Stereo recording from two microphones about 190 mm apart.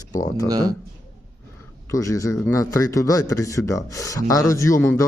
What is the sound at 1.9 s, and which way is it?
A man's voice, 15° left (ahead or behind).